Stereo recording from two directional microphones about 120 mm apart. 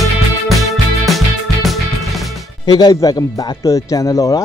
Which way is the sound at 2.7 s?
35° left (ahead or behind).